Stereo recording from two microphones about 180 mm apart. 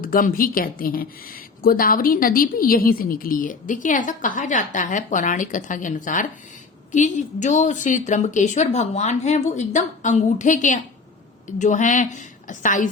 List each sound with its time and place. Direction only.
0.0 s speech: 50° left (ahead or behind)